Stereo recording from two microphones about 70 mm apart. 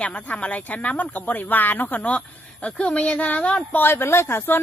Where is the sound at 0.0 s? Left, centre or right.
Centre.